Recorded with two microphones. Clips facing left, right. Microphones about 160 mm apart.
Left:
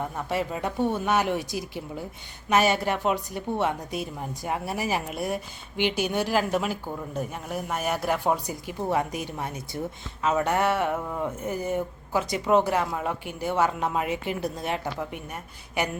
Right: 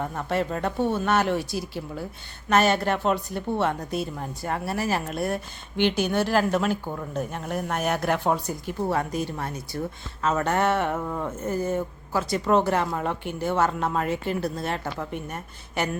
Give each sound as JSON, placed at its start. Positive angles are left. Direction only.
{"t": 0.3, "sound": "a woman's voice", "side_deg": 10}